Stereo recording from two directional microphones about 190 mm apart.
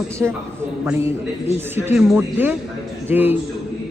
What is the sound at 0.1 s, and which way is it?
A man's voice, 15° right (ahead or behind).